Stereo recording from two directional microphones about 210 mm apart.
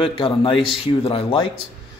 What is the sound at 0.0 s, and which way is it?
Speech, 25° left (ahead or behind).